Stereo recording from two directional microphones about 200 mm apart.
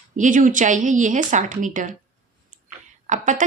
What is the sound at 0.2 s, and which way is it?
A woman's voice, 40° right (ahead or behind).